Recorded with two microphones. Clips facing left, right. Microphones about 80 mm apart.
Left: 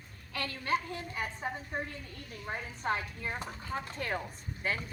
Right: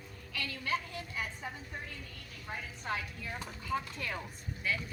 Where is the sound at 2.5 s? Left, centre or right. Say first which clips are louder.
Left 4 dB; left.